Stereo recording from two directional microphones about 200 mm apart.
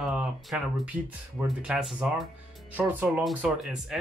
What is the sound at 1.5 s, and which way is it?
Speech, 5° right (ahead or behind).